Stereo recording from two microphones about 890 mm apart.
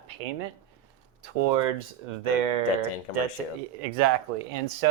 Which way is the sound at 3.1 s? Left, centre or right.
Left.